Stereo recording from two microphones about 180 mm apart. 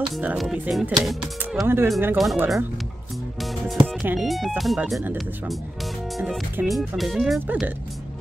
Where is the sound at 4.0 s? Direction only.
Centre (ahead or behind).